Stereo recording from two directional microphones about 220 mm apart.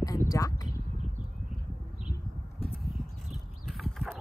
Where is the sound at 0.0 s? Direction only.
15° left (ahead or behind).